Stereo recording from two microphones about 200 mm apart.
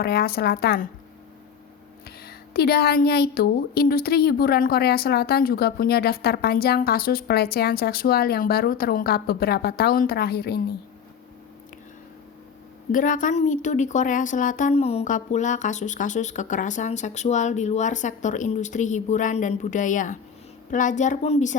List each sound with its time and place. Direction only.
0.0 s a woman's voice: 50° left (ahead or behind)
2.0 s a woman's voice: 50° left (ahead or behind)
12.9 s a woman's voice: 40° left (ahead or behind)